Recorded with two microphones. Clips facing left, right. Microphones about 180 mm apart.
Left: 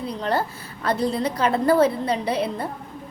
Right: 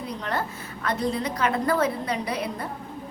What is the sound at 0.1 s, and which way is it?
A woman's voice, 30° left (ahead or behind).